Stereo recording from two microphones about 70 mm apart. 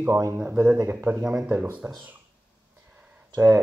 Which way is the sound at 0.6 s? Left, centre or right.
Right.